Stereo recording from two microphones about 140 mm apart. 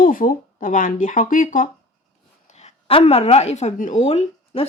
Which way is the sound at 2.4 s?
55° left (ahead or behind).